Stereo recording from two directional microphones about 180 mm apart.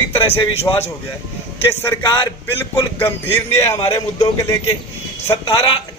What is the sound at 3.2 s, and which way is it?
A man's voice, 15° left (ahead or behind).